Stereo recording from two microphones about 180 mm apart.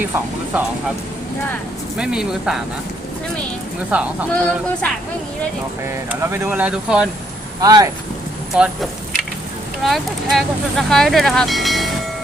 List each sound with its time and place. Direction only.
2.0 s speech: 5° right (ahead or behind)
3.9 s speech: 5° right (ahead or behind)
4.3 s speech: 5° left (ahead or behind)
5.8 s speech: 15° right (ahead or behind)
7.6 s speech: 20° right (ahead or behind)
8.5 s speech: 5° right (ahead or behind)